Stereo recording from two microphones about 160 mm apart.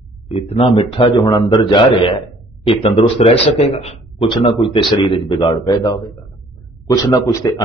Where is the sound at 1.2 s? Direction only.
25° left (ahead or behind).